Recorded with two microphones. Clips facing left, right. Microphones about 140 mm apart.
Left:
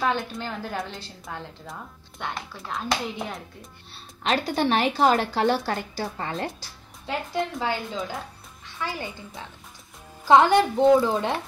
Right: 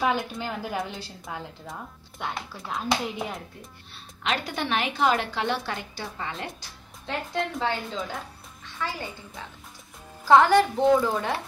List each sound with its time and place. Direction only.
0.0 s a woman's voice: 5° right (ahead or behind)
3.9 s a woman's voice: 35° left (ahead or behind)
7.1 s a woman's voice: 5° left (ahead or behind)
8.7 s a woman's voice: 15° left (ahead or behind)
10.2 s speech: 20° left (ahead or behind)